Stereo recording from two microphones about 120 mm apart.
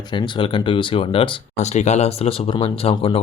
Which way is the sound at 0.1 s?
45° left (ahead or behind).